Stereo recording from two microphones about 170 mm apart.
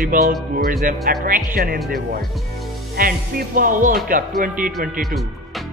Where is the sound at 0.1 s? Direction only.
50° right (ahead or behind).